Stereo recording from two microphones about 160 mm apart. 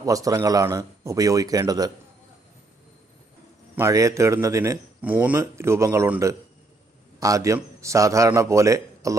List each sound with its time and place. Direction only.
0.0 s a man's voice: 20° right (ahead or behind)
3.7 s a man's voice: 20° right (ahead or behind)